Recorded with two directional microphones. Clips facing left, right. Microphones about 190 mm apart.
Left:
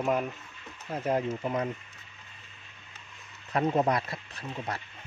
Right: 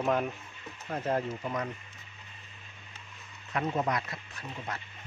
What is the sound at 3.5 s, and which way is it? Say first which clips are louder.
Speech: left 5 dB; 35° left (ahead or behind).